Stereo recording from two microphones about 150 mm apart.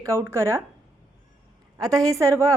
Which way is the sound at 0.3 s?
15° right (ahead or behind).